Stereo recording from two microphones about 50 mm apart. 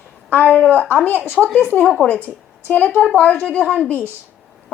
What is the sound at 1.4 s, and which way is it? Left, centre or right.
Speech, centre.